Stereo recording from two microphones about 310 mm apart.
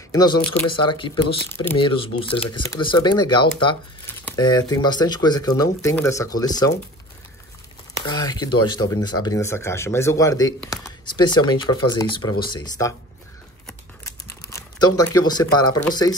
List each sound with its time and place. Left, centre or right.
0.1 s speech: centre
8.0 s speech: centre
15.0 s speech: centre